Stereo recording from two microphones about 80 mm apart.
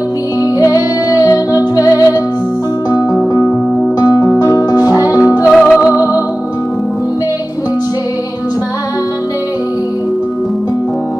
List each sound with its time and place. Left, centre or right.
0.4 s music: left
5.5 s music: centre
5.9 s music: left